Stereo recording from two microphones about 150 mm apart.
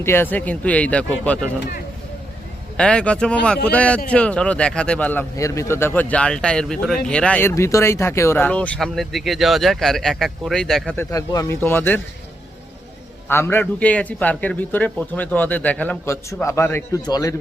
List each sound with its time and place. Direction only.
0.0 s speech: 15° left (ahead or behind)
2.7 s speech: 5° left (ahead or behind)
5.4 s speech: 20° left (ahead or behind); by 10.9 s 5° left (ahead or behind)
10.9 s speech: 25° left (ahead or behind)
13.2 s speech: 15° left (ahead or behind)